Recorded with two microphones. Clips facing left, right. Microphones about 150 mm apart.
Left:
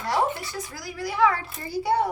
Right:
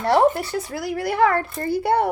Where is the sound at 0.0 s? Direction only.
65° right (ahead or behind).